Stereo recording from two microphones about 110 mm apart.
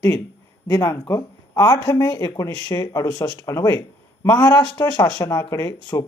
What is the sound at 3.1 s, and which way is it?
Speech, 40° left (ahead or behind).